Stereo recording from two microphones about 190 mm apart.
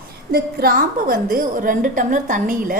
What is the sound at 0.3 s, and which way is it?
A woman's voice, 50° right (ahead or behind).